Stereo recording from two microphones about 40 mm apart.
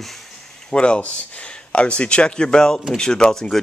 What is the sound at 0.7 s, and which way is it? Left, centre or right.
Speech, left.